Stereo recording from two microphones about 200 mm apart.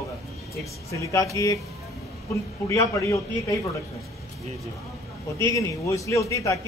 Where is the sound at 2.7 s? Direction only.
15° left (ahead or behind).